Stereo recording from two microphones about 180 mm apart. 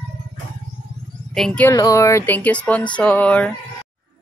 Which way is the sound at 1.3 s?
5° left (ahead or behind).